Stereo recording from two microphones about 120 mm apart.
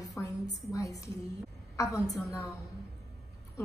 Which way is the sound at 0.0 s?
30° left (ahead or behind).